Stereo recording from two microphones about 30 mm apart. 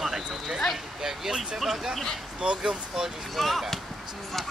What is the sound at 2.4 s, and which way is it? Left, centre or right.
Speech, right.